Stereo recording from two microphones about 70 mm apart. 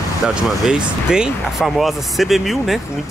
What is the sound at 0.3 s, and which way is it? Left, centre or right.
Speech, centre.